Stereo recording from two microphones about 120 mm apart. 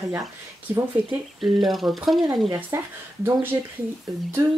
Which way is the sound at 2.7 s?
25° right (ahead or behind).